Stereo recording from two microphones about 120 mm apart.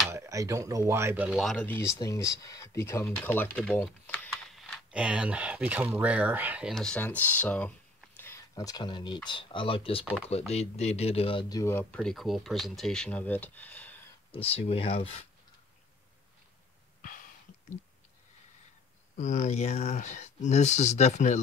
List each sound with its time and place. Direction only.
0.1 s speech: 25° right (ahead or behind)
1.8 s speech: 25° left (ahead or behind)
4.5 s speech: centre (ahead or behind)
6.7 s speech: 5° left (ahead or behind)
8.2 s a sound: 20° left (ahead or behind)
8.6 s speech: 35° left (ahead or behind)
10.3 s speech: 60° left (ahead or behind)
11.4 s speech: 30° left (ahead or behind)
11.7 s speech: 10° left (ahead or behind)
14.3 s speech: 55° left (ahead or behind)
19.1 s speech: 85° left